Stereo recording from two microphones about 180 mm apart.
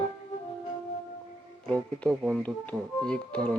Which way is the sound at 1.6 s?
5° left (ahead or behind).